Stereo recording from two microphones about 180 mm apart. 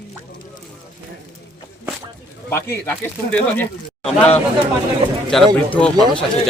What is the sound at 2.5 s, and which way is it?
Speech, 15° left (ahead or behind).